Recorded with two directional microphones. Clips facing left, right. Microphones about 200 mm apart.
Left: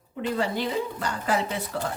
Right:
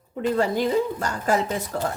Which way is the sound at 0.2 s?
45° right (ahead or behind).